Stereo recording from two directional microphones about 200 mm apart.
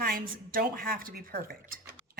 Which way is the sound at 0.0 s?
45° right (ahead or behind).